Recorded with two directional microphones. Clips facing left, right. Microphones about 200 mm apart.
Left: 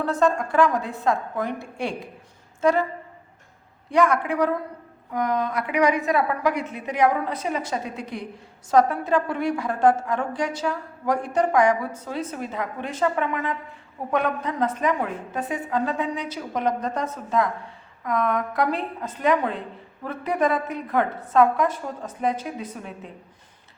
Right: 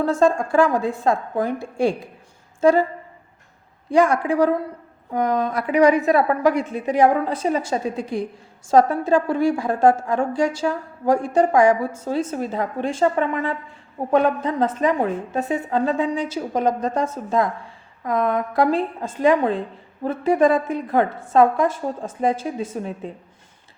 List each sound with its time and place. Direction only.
0.0 s a woman's voice: 25° right (ahead or behind)
2.6 s a sound: 30° right (ahead or behind)
3.9 s a woman's voice: 30° right (ahead or behind)